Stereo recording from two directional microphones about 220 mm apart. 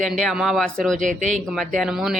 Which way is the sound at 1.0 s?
35° right (ahead or behind).